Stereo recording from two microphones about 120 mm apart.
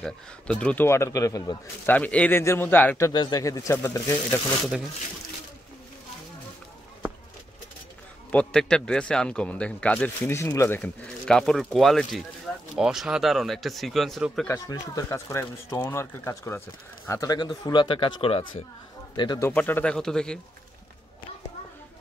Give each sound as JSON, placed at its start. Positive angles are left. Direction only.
{"t": 0.0, "sound": "speech", "side_deg": 10}
{"t": 0.8, "sound": "speech", "side_deg": 25}
{"t": 1.9, "sound": "speech", "side_deg": 10}
{"t": 3.1, "sound": "speech", "side_deg": 35}
{"t": 8.3, "sound": "speech", "side_deg": 10}
{"t": 10.8, "sound": "speech", "side_deg": 5}
{"t": 14.7, "sound": "speech", "side_deg": 25}
{"t": 19.1, "sound": "speech", "side_deg": 40}
{"t": 19.5, "sound": "speech", "side_deg": 15}